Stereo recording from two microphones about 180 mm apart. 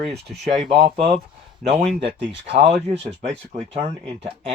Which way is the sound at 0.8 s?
35° right (ahead or behind).